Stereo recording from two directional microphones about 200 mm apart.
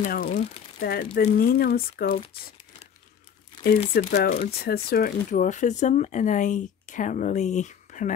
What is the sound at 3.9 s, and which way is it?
Speech, 50° left (ahead or behind).